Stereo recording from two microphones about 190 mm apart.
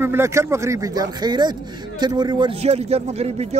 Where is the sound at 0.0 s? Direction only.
15° right (ahead or behind).